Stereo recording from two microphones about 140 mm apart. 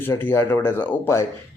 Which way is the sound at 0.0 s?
15° left (ahead or behind).